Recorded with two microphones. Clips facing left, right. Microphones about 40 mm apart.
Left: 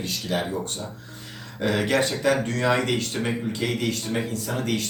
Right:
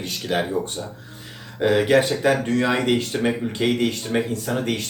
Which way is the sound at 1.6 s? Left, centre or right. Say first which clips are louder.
Right 5 dB; centre.